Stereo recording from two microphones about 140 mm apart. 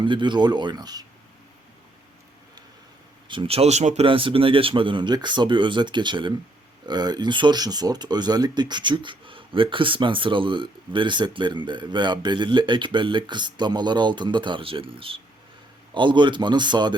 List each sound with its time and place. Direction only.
0.0 s speech: 35° right (ahead or behind)
3.2 s speech: 40° right (ahead or behind)
4.0 s speech: 40° right (ahead or behind)